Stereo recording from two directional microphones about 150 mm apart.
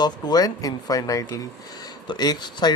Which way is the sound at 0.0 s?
25° left (ahead or behind).